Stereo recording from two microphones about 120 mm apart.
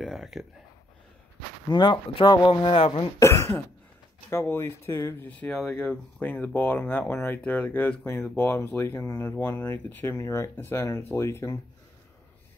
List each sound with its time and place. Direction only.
0.0 s a sound: centre (ahead or behind)
1.7 s speech: 40° left (ahead or behind)
3.2 s cough: 25° left (ahead or behind)
4.3 s speech: 20° left (ahead or behind)